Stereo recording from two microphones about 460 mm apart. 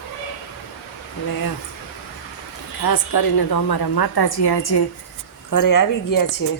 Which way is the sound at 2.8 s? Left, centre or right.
Left.